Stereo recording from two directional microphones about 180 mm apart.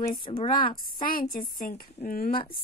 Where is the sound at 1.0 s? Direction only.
50° left (ahead or behind).